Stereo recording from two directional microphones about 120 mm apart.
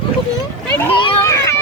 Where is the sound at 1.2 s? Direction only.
25° left (ahead or behind).